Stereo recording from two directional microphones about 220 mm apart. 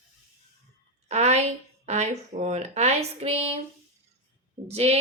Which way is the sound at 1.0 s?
30° right (ahead or behind).